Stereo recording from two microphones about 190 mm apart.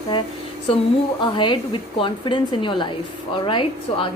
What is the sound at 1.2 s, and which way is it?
A woman's voice, 25° left (ahead or behind).